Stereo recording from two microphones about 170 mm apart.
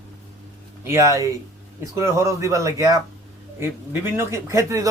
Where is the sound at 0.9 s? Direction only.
20° right (ahead or behind).